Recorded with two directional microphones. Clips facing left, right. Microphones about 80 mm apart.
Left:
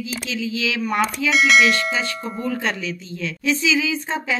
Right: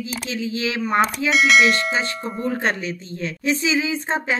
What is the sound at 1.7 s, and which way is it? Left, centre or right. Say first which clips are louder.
Speech: even; right.